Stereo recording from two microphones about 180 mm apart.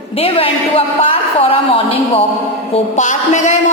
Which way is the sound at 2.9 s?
40° left (ahead or behind).